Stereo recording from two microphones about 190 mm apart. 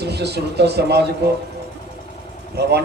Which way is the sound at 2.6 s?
60° right (ahead or behind).